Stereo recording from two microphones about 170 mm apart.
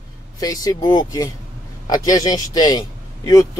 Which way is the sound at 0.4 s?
20° left (ahead or behind).